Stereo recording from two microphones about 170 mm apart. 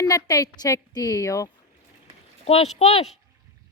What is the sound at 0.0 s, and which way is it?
Speech, 20° left (ahead or behind).